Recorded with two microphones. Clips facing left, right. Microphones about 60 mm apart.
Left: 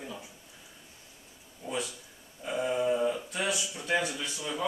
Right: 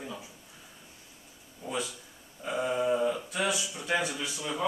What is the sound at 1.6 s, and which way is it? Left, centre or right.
Speech, centre.